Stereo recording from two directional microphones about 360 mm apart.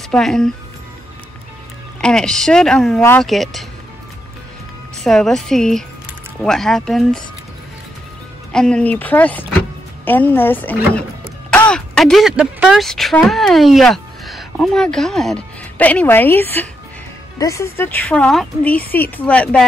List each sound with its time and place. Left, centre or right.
0.1 s speech: centre
2.0 s speech: centre
4.9 s speech: centre
8.5 s speech: centre